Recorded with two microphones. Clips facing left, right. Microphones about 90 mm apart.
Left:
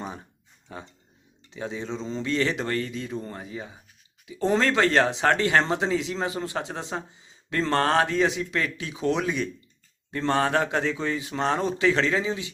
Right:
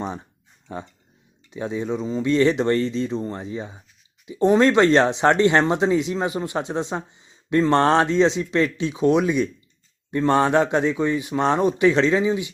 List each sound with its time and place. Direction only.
1.5 s speech: 20° right (ahead or behind)